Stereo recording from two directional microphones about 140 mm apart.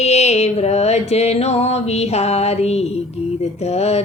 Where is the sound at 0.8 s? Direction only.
50° left (ahead or behind).